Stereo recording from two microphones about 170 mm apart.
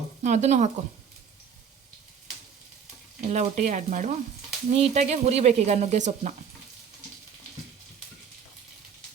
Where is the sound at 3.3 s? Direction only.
45° right (ahead or behind).